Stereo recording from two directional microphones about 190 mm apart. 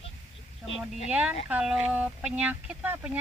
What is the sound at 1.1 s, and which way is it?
Speech, 5° right (ahead or behind).